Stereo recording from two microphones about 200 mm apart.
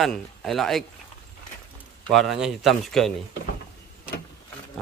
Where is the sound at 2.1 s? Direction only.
Centre (ahead or behind).